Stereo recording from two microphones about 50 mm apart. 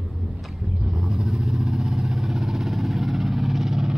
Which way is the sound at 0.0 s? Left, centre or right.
Centre.